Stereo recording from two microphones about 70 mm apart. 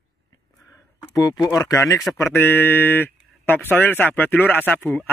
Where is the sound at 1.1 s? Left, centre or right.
Left.